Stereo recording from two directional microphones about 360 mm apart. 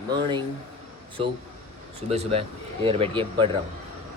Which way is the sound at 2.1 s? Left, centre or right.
Centre.